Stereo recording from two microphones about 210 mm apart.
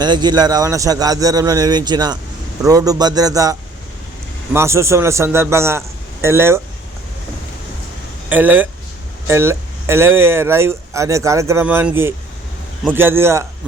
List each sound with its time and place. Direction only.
0.0 s speech: 20° right (ahead or behind)
8.3 s speech: 10° right (ahead or behind)